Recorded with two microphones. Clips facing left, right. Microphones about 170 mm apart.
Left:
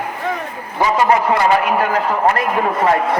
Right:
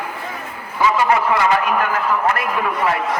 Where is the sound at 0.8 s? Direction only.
35° left (ahead or behind).